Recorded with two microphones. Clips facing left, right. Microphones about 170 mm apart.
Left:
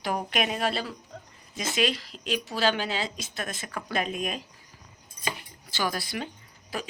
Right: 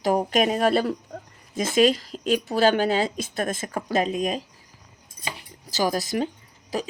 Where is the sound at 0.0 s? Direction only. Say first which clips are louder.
Right 8 dB; 40° right (ahead or behind).